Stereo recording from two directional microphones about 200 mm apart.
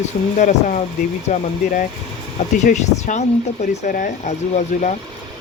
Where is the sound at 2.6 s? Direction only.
35° left (ahead or behind).